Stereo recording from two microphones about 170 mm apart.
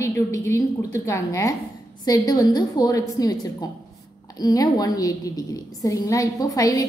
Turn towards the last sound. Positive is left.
turn(degrees=20)  # may be behind; listen again after turning